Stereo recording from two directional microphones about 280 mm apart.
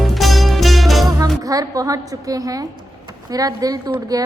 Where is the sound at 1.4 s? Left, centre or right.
Centre.